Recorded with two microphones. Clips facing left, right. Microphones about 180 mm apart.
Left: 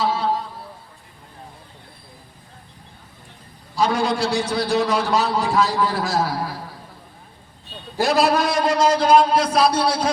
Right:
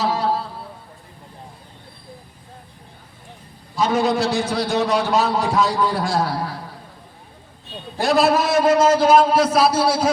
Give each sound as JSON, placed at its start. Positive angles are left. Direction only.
{"t": 0.0, "sound": "music", "side_deg": -40}
{"t": 3.8, "sound": "a man's voice", "side_deg": 0}
{"t": 7.9, "sound": "a man's voice", "side_deg": 0}